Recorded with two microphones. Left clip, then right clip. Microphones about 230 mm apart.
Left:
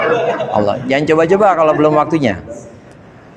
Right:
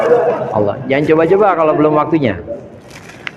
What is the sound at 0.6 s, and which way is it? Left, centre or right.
A man's voice, left.